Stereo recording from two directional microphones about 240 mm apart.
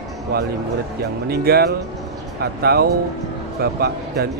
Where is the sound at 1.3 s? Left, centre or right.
Right.